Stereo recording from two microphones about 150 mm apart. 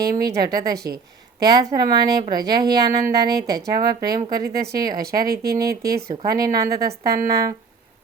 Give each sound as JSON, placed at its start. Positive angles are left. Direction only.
{"t": 0.0, "sound": "speech", "side_deg": -25}
{"t": 5.3, "sound": "a woman's voice", "side_deg": -90}
{"t": 6.2, "sound": "speech", "side_deg": -25}
{"t": 6.7, "sound": "a woman's voice", "side_deg": -90}